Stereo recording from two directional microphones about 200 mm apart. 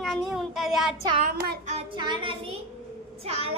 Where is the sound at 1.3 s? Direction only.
50° right (ahead or behind).